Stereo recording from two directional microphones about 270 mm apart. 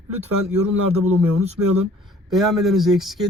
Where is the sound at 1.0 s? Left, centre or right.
Right.